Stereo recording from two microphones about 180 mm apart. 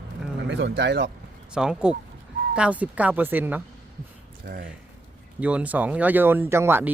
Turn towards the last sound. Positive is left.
turn(degrees=-10)  # may be behind; listen again after turning